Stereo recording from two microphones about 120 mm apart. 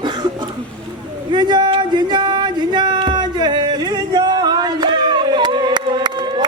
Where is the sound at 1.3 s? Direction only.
40° right (ahead or behind).